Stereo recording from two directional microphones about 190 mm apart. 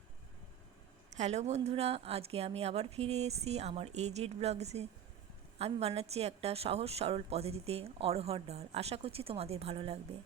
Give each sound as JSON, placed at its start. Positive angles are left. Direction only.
{"t": 1.1, "sound": "a woman's voice", "side_deg": -35}